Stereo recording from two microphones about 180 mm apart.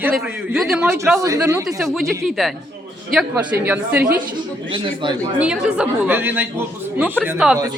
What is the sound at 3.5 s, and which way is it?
Speech, 10° right (ahead or behind).